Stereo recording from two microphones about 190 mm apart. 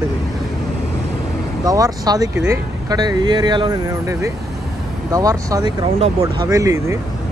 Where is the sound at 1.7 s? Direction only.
20° right (ahead or behind).